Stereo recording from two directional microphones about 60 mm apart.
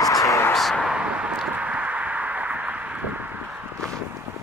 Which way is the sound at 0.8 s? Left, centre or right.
Centre.